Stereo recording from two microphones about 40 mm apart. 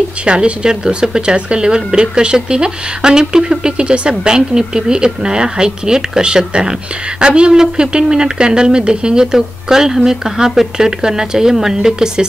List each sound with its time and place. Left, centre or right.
0.2 s speech: right